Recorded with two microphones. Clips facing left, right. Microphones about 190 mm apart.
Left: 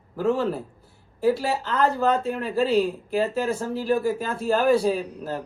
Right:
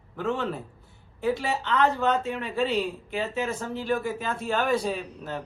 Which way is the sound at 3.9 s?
35° left (ahead or behind).